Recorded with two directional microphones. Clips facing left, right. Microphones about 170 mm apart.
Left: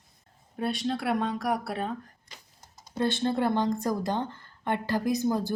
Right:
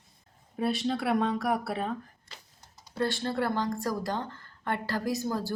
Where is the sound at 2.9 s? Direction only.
20° left (ahead or behind).